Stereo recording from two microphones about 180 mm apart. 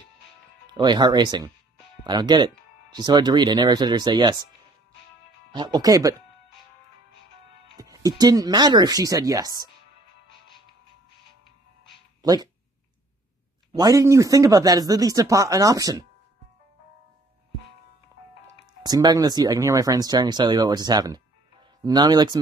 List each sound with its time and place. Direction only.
0.7 s speech: 25° right (ahead or behind)
5.5 s speech: 25° right (ahead or behind)
7.7 s speech: 20° right (ahead or behind)
12.2 s speech: 20° right (ahead or behind)
13.7 s speech: 20° right (ahead or behind)
18.8 s speech: 20° right (ahead or behind)